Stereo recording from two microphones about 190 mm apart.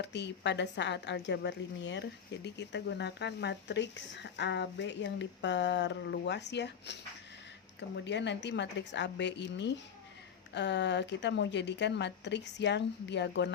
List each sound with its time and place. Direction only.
0.0 s a woman's voice: 65° left (ahead or behind)